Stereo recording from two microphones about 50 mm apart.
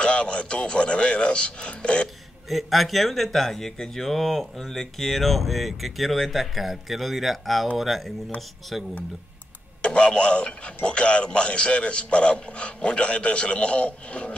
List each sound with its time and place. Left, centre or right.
0.0 s speech: left
2.5 s speech: centre
9.8 s a man's voice: left